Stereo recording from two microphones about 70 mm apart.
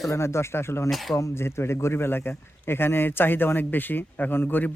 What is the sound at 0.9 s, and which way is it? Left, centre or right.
Speech, centre.